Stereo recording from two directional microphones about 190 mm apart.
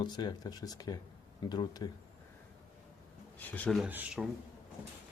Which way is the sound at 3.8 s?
5° right (ahead or behind).